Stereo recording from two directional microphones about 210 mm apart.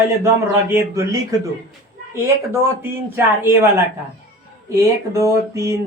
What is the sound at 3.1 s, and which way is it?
Speech, 10° right (ahead or behind).